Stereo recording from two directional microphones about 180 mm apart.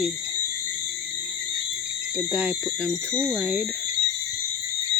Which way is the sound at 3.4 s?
10° right (ahead or behind).